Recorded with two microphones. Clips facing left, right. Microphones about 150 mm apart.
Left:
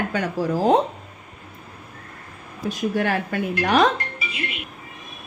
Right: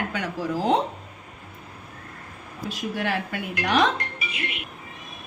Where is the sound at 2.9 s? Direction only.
50° left (ahead or behind).